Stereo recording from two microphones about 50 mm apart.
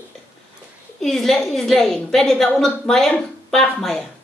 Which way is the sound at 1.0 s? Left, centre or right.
Centre.